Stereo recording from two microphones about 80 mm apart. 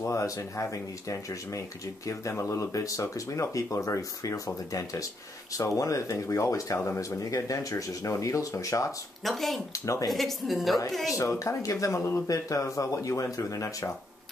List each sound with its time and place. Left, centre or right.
0.0 s speech: left
5.6 s speech: left
9.2 s speech: centre
9.7 s speech: left
10.0 s speech: centre
11.1 s speech: left